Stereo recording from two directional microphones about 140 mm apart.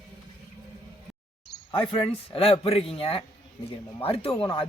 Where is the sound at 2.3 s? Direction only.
40° left (ahead or behind).